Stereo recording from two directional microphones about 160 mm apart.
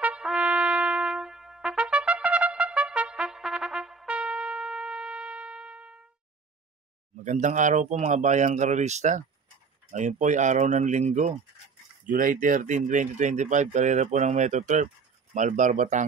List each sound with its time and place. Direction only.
0.0 s trumpet: 5° right (ahead or behind)
7.2 s speech: 50° right (ahead or behind)
12.1 s speech: 60° right (ahead or behind)